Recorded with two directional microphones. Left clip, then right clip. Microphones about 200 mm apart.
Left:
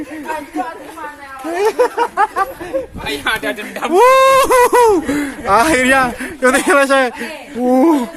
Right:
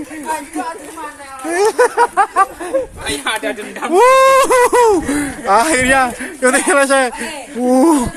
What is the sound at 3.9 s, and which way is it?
Speech, centre (ahead or behind).